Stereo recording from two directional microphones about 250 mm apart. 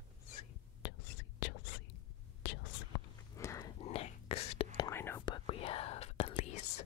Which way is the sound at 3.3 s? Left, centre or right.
Centre.